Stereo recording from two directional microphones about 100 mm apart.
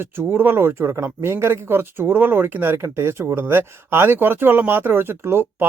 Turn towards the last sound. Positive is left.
turn(degrees=-25)  # may be behind; listen again after turning